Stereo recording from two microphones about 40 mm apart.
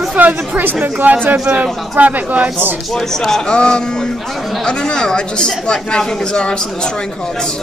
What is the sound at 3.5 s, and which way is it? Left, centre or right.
A woman's voice, left.